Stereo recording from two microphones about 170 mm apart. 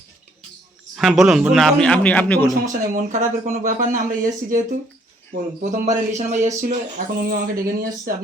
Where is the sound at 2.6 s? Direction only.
50° right (ahead or behind).